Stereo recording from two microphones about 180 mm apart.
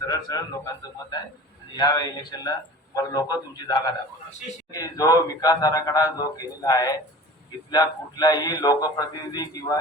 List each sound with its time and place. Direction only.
0.0 s speech: 20° left (ahead or behind)
1.7 s speech: 20° left (ahead or behind)